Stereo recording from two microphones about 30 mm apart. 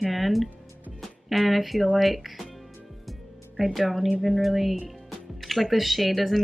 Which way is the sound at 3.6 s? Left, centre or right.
Centre.